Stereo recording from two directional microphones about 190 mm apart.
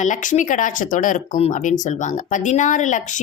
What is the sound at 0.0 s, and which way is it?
Speech, 40° left (ahead or behind).